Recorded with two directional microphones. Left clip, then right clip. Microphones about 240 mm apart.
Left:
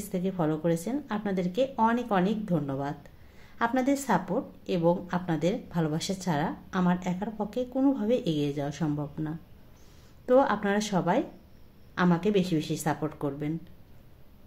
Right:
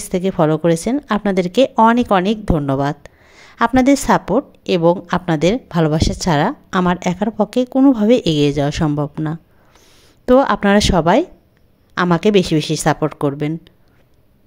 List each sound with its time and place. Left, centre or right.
0.0 s a woman's voice: right